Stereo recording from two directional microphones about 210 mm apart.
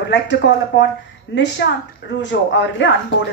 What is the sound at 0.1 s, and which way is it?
Speech, 55° left (ahead or behind).